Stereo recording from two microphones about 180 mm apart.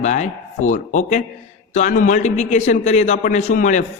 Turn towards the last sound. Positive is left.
turn(degrees=45)  # may be behind; listen again after turning